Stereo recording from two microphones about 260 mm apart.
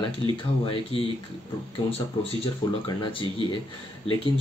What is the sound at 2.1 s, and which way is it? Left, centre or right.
Speech, centre.